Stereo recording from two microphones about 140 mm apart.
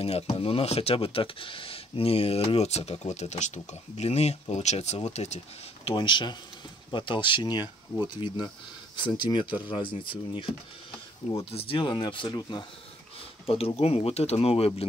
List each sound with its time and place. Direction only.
0.0 s speech: 45° left (ahead or behind)
5.9 s speech: 35° left (ahead or behind)
11.5 s speech: 40° left (ahead or behind)
13.5 s speech: 45° left (ahead or behind)